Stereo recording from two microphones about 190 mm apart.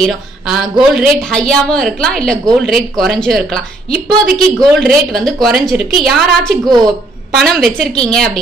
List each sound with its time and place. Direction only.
0.0 s a woman's voice: centre (ahead or behind)
6.6 s speech: 20° right (ahead or behind)
7.3 s a woman's voice: centre (ahead or behind)